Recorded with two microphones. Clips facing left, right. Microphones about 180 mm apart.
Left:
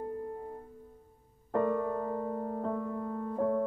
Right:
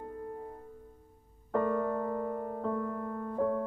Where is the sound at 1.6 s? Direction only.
25° left (ahead or behind).